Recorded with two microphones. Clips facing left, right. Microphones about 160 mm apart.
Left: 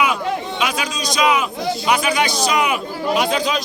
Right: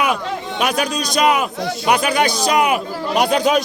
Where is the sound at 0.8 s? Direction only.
55° right (ahead or behind).